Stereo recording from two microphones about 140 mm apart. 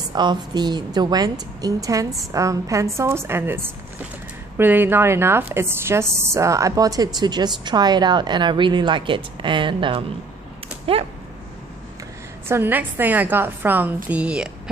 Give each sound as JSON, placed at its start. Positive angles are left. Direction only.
{"t": 0.1, "sound": "a woman's voice", "side_deg": -30}
{"t": 12.4, "sound": "a woman's voice", "side_deg": -15}